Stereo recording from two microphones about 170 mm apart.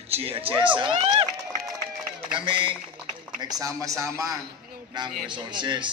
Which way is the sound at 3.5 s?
20° right (ahead or behind).